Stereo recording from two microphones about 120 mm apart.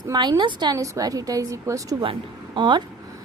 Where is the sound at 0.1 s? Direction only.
35° right (ahead or behind).